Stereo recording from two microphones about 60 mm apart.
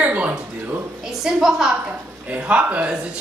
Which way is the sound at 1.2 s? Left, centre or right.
Centre.